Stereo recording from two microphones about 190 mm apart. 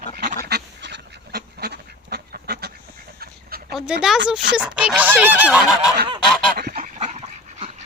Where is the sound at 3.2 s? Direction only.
55° right (ahead or behind).